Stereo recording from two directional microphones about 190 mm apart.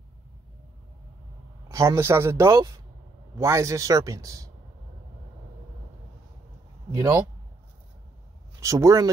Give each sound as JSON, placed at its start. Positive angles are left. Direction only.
{"t": 1.7, "sound": "speech", "side_deg": -15}
{"t": 6.9, "sound": "speech", "side_deg": -15}
{"t": 8.5, "sound": "speech", "side_deg": -15}